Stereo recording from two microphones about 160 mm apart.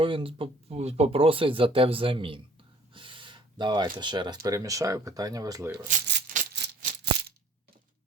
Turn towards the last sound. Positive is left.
turn(degrees=-90)